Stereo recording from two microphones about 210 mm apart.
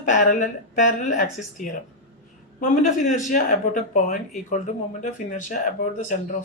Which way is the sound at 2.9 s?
35° left (ahead or behind).